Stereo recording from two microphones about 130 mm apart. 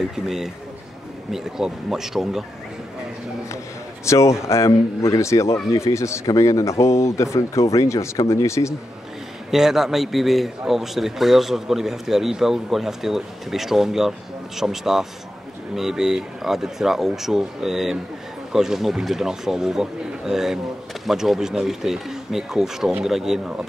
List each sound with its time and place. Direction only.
0.0 s a man's voice: 5° right (ahead or behind)
4.0 s a man's voice: 20° left (ahead or behind)
9.5 s a man's voice: 5° right (ahead or behind)